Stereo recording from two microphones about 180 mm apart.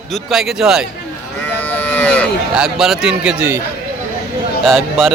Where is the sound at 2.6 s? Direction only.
Centre (ahead or behind).